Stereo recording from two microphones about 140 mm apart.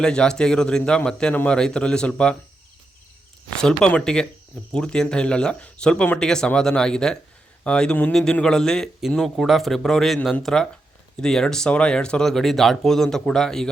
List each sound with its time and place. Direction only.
0.0 s speech: 5° left (ahead or behind)
3.6 s speech: 5° left (ahead or behind)